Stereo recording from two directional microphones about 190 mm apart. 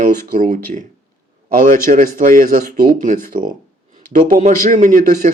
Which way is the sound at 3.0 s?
45° right (ahead or behind).